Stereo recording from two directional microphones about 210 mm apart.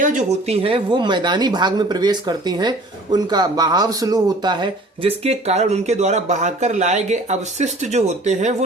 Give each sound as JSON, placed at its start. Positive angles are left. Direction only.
{"t": 0.0, "sound": "speech", "side_deg": -35}